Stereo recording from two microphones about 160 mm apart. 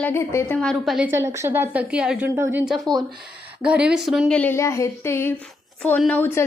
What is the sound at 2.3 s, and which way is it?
Speech, 15° right (ahead or behind).